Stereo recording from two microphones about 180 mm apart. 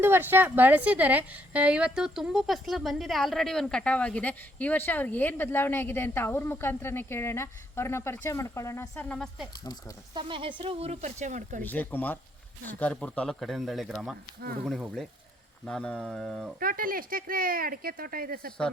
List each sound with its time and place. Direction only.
0.0 s a woman's voice: 10° right (ahead or behind)
10.2 s speech: 30° right (ahead or behind)
11.6 s a woman's voice: 10° left (ahead or behind)
16.6 s speech: 55° right (ahead or behind)